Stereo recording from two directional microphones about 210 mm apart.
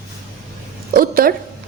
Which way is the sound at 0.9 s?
45° right (ahead or behind).